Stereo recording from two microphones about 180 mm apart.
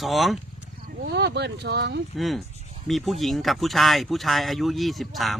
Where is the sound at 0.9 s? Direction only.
70° right (ahead or behind).